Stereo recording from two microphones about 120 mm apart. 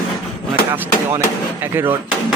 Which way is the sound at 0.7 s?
25° right (ahead or behind).